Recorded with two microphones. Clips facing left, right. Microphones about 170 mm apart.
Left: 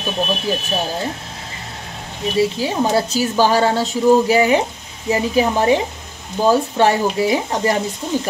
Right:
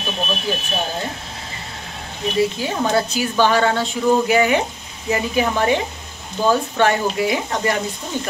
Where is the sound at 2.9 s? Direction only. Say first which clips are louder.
Left 2 dB; 35° left (ahead or behind).